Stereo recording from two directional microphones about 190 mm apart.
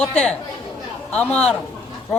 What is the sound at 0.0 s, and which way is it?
A woman's voice, 5° left (ahead or behind).